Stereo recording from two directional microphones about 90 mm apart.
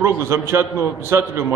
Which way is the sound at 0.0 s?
30° right (ahead or behind).